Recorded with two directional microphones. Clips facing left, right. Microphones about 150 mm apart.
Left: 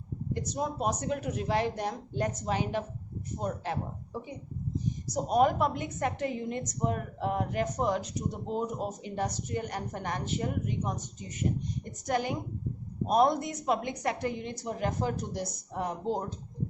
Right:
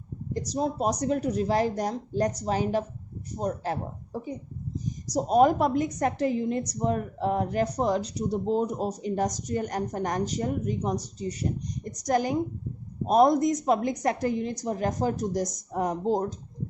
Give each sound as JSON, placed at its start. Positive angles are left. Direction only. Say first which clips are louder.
{"t": 0.3, "sound": "a woman's voice", "louder": "right 5 dB", "side_deg": -35}